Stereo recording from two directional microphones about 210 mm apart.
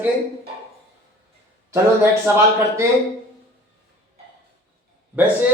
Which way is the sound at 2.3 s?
15° right (ahead or behind).